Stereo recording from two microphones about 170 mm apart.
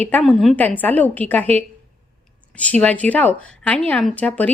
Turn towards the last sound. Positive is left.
turn(degrees=10)  # may be behind; listen again after turning